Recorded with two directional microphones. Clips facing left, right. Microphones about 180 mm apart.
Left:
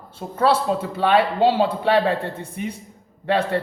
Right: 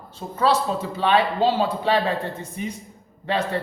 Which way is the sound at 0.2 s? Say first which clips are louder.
Left 2 dB; 55° left (ahead or behind).